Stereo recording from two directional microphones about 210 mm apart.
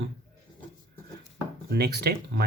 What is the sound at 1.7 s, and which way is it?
Speech, 50° right (ahead or behind).